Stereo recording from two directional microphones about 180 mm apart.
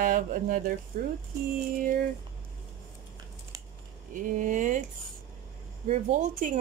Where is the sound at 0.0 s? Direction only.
50° right (ahead or behind).